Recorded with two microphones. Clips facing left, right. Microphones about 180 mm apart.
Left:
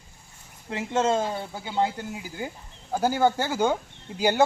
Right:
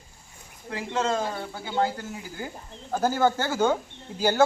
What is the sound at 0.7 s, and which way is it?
Speech, 25° left (ahead or behind).